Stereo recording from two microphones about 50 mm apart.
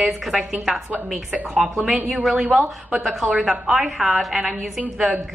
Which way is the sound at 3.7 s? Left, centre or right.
Centre.